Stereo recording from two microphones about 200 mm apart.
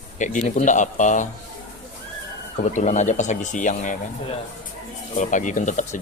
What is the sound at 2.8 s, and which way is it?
Speech, 35° left (ahead or behind).